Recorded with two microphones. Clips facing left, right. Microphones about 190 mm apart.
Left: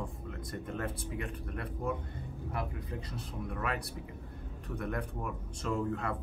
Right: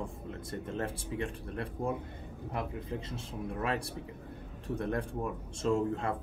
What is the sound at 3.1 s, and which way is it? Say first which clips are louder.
Speech: right 2 dB; 30° right (ahead or behind).